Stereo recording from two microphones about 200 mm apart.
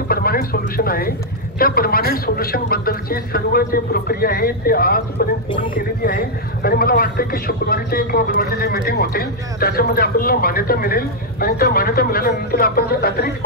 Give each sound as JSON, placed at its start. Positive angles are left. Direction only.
{"t": 0.1, "sound": "a man's voice", "side_deg": 50}